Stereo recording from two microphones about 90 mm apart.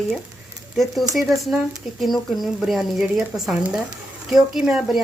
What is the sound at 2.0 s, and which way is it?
Speech, centre (ahead or behind).